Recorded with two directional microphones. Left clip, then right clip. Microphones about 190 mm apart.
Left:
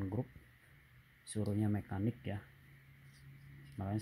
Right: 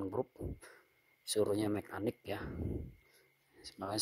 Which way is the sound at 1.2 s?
25° right (ahead or behind).